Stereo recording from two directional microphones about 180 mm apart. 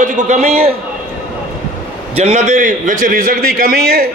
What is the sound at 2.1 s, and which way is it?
A man's voice, 35° right (ahead or behind).